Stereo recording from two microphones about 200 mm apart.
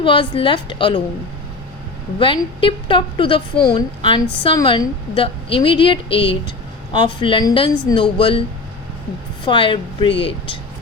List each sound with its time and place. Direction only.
0.0 s a woman's voice: 25° left (ahead or behind)
2.1 s a woman's voice: 25° left (ahead or behind)
9.5 s a woman's voice: 25° left (ahead or behind)